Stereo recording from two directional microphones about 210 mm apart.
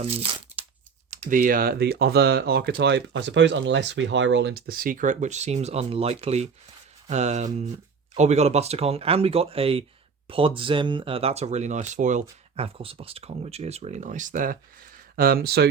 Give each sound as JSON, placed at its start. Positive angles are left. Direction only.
{"t": 0.0, "sound": "speech", "side_deg": -25}
{"t": 1.1, "sound": "speech", "side_deg": -40}